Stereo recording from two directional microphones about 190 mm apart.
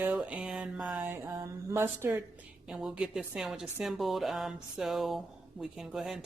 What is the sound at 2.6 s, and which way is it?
A woman's voice, 5° right (ahead or behind).